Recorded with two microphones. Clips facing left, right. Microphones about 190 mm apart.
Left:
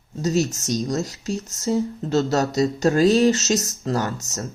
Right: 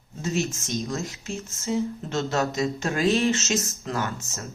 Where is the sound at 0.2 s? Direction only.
40° left (ahead or behind).